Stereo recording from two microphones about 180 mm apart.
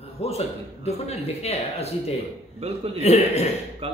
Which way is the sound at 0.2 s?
35° left (ahead or behind).